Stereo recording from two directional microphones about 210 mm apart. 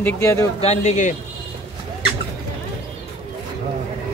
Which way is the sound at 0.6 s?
30° left (ahead or behind).